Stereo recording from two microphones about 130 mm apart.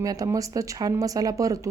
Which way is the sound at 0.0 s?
25° right (ahead or behind).